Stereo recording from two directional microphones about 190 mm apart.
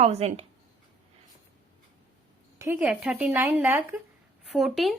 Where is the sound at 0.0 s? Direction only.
35° right (ahead or behind).